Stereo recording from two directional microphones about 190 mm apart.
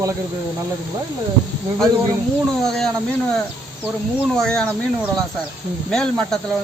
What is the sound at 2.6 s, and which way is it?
Speech, centre (ahead or behind).